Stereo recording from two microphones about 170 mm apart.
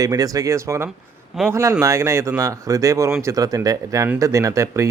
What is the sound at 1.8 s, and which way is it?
Speech, 15° right (ahead or behind).